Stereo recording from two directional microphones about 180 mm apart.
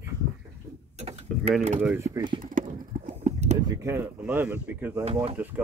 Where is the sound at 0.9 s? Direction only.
35° right (ahead or behind).